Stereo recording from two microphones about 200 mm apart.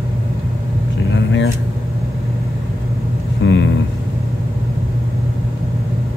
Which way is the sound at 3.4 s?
65° left (ahead or behind).